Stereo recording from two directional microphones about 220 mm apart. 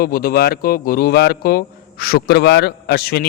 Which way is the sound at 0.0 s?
40° left (ahead or behind).